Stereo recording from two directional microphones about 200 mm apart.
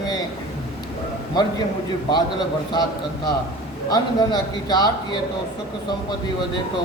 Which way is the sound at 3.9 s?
20° left (ahead or behind).